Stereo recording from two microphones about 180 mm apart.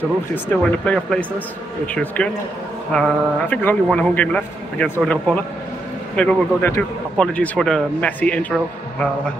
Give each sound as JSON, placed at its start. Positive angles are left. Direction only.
{"t": 0.3, "sound": "a man's voice", "side_deg": 10}